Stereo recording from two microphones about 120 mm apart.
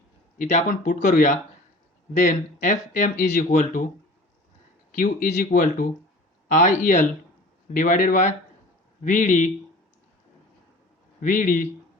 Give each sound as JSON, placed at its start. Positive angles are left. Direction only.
{"t": 0.3, "sound": "speech", "side_deg": 90}
{"t": 4.9, "sound": "speech", "side_deg": 85}
{"t": 11.2, "sound": "speech", "side_deg": 90}